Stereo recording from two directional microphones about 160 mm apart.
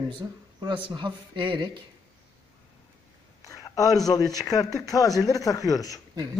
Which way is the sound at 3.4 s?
20° left (ahead or behind).